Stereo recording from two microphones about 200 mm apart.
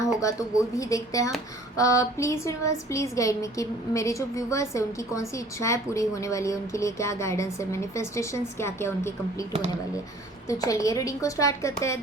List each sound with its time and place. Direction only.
0.2 s a woman's voice: 15° left (ahead or behind)
10.6 s a woman's voice: 15° left (ahead or behind)